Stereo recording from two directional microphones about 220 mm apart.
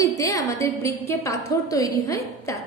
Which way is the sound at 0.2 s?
15° left (ahead or behind).